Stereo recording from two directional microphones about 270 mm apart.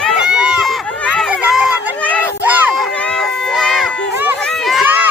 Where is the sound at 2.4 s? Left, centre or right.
Centre.